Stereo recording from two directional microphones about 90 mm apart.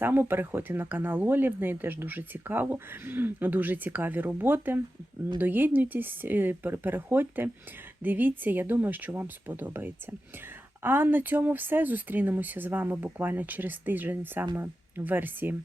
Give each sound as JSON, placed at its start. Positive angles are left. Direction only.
{"t": 0.0, "sound": "speech", "side_deg": -25}